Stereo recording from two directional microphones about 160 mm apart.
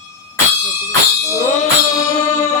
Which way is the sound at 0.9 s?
20° left (ahead or behind).